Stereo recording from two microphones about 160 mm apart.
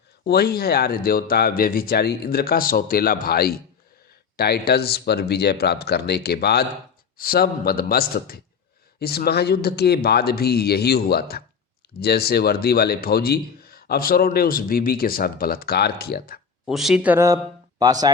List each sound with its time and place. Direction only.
0.3 s a man's voice: 80° left
7.2 s a man's voice: 70° left (ahead or behind)
16.6 s speech: centre (ahead or behind); by 18.1 s 25° right (ahead or behind)